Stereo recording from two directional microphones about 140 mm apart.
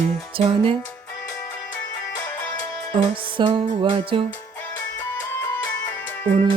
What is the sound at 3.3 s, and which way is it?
Music, 40° right (ahead or behind).